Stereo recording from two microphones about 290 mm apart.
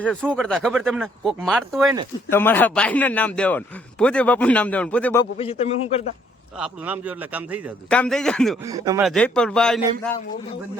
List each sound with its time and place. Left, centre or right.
0.0 s a man's voice: centre
5.4 s a man's voice: centre
6.6 s a man's voice: centre
8.6 s speech: centre
9.0 s a man's voice: centre